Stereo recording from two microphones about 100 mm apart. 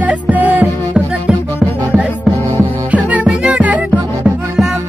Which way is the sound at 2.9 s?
10° right (ahead or behind).